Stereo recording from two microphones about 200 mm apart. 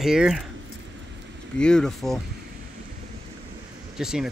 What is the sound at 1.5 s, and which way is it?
Speech, 5° left (ahead or behind).